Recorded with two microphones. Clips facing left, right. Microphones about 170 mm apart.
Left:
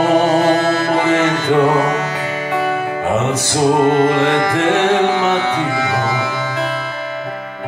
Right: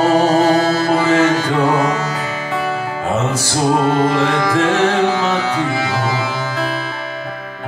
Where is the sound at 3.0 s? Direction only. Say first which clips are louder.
Left 1 dB; 20° left (ahead or behind).